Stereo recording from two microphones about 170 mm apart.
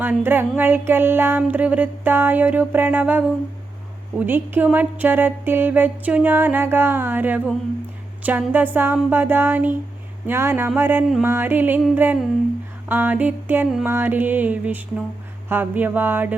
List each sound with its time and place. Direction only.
0.0 s speech: 10° right (ahead or behind)